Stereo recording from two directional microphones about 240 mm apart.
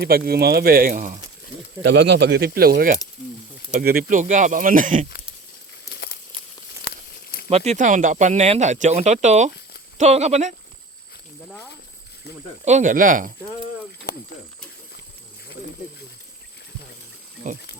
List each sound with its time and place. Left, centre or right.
0.0 s speech: right
1.8 s speech: right
2.1 s speech: right
7.5 s speech: right
12.6 s speech: right